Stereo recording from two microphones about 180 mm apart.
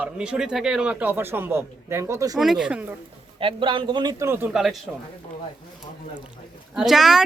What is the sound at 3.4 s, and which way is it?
A man's voice, 30° right (ahead or behind).